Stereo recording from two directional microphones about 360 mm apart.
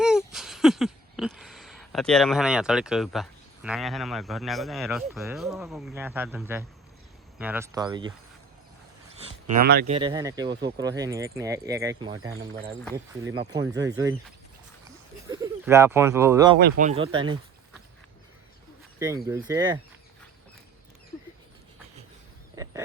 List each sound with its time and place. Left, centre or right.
0.0 s a sound: centre
7.3 s speech: centre
9.5 s speech: right; by 16.6 s centre
16.6 s speech: right
18.9 s speech: centre
22.5 s wild animals: centre